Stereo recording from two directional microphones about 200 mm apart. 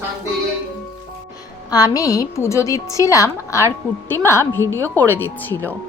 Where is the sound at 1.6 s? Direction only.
20° left (ahead or behind).